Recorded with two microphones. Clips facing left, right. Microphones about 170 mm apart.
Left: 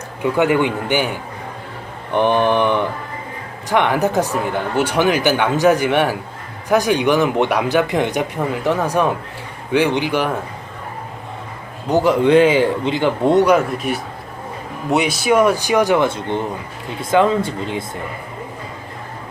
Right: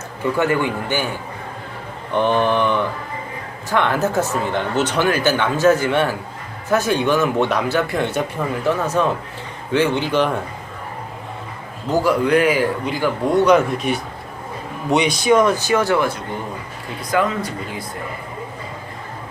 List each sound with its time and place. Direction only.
0.2 s speech: 15° left (ahead or behind)
2.1 s speech: 15° left (ahead or behind)
11.9 s speech: 20° left (ahead or behind)
13.4 s speech: 5° left (ahead or behind); by 17.8 s 25° left (ahead or behind)